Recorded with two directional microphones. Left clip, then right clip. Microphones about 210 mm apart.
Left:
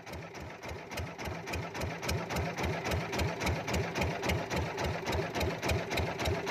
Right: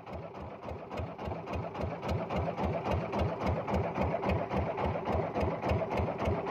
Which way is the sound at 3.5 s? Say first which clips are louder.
Right 1 dB; 50° left (ahead or behind).